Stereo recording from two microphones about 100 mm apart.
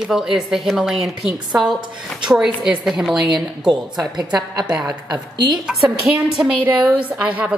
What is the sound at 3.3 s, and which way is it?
A woman's voice, 45° right (ahead or behind).